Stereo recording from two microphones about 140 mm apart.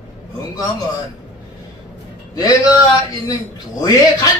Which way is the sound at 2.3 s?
30° left (ahead or behind).